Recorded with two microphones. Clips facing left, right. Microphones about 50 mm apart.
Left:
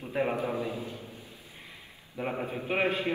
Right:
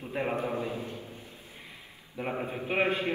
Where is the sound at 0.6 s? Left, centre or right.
Right.